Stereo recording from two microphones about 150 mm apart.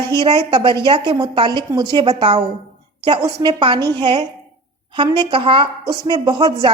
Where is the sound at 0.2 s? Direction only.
40° right (ahead or behind).